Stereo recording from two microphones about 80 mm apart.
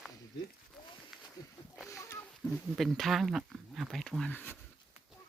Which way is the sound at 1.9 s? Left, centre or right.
Left.